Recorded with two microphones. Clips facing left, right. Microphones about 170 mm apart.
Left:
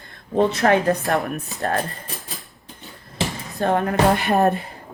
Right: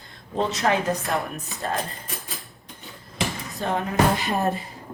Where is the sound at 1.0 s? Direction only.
Centre (ahead or behind).